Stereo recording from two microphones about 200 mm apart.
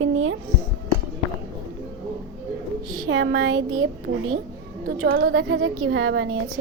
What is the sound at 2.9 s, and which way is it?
A woman's voice, 75° right (ahead or behind).